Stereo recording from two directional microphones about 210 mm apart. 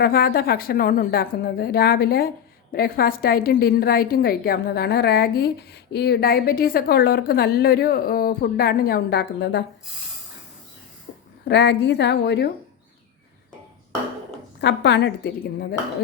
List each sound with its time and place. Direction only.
0.0 s a woman's voice: 45° left (ahead or behind)
11.4 s a woman's voice: 55° left (ahead or behind)
14.6 s a woman's voice: 55° left (ahead or behind)